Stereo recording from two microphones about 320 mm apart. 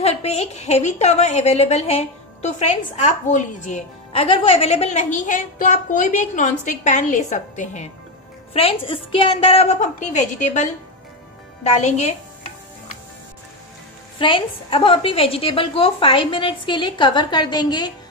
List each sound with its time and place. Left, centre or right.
0.0 s a woman's voice: centre
14.1 s a woman's voice: centre